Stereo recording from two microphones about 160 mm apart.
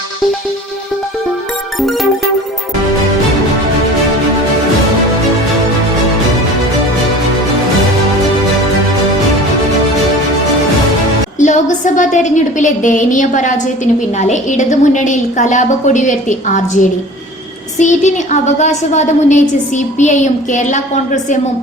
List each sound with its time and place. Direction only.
11.3 s a woman's voice: 50° left (ahead or behind)